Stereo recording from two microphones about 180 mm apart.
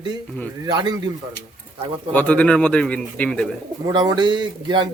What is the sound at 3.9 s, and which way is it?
A man's voice, 25° right (ahead or behind).